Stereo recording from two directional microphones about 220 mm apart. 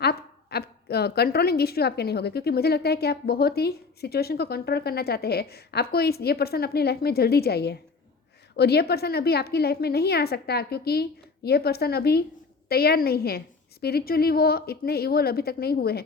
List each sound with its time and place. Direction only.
0.0 s a woman's voice: 45° left (ahead or behind)